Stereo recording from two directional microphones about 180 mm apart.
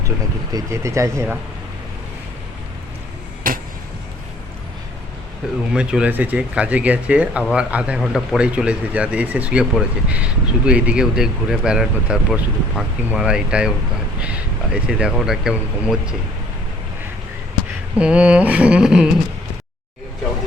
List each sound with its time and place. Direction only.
0.5 s speech: 15° right (ahead or behind)
3.4 s a sound: 50° right (ahead or behind)
5.7 s speech: 5° right (ahead or behind)
17.9 s speech: 5° right (ahead or behind)